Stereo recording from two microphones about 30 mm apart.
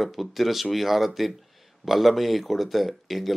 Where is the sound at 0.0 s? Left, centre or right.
Centre.